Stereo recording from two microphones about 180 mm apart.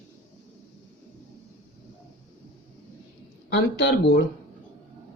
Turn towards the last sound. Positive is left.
turn(degrees=65)  # may be behind; listen again after turning